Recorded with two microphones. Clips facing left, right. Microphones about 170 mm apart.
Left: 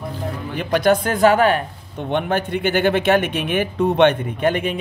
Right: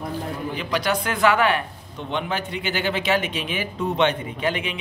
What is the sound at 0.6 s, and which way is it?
A man's voice, 50° left (ahead or behind).